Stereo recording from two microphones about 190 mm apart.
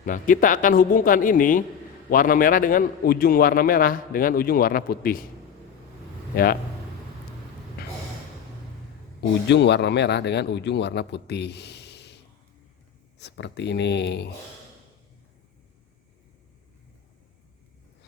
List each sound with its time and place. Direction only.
0.0 s a man's voice: 45° left (ahead or behind)
6.3 s a man's voice: 50° left (ahead or behind)
9.5 s speech: 65° left (ahead or behind)